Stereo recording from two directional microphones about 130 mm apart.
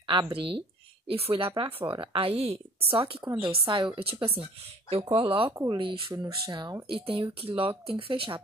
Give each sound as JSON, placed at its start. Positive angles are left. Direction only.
{"t": 0.0, "sound": "speech", "side_deg": -35}